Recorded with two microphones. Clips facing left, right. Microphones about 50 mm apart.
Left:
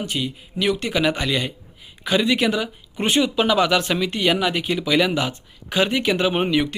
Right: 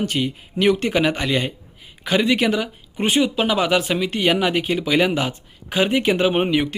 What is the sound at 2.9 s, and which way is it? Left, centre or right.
A man's voice, centre.